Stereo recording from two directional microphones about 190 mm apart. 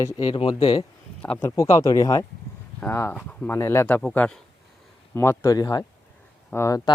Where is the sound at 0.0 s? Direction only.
25° left (ahead or behind).